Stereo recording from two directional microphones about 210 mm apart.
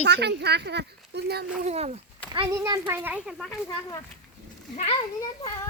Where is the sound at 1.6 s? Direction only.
30° right (ahead or behind).